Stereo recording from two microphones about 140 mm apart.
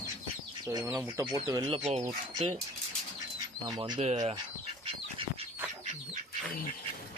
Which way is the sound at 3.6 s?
30° right (ahead or behind).